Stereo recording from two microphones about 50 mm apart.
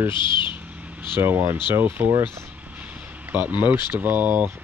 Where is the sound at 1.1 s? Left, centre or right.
Right.